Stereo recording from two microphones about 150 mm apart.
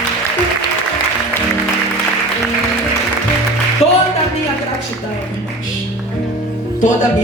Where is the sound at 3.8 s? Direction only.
45° left (ahead or behind).